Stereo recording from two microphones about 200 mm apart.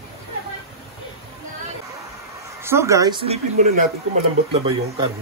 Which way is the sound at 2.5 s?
10° right (ahead or behind).